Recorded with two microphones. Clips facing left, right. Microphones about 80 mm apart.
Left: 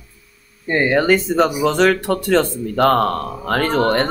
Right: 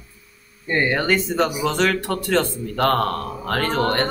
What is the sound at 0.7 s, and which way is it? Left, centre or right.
Speech, centre.